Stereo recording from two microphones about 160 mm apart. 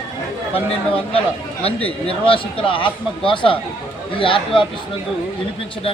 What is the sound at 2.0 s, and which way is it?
Speech, 35° left (ahead or behind).